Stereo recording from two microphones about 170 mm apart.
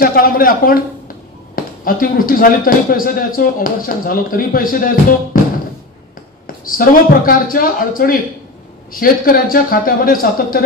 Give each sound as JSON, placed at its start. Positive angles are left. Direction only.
{"t": 0.0, "sound": "speech", "side_deg": 55}
{"t": 6.4, "sound": "a woman's voice", "side_deg": 55}